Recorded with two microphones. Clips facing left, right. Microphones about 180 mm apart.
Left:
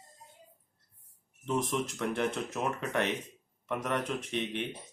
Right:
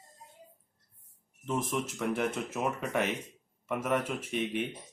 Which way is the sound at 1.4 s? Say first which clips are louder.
Left 1 dB; 5° right (ahead or behind).